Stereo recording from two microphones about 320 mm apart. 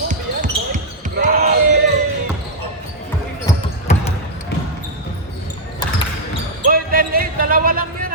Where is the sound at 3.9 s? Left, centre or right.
Left.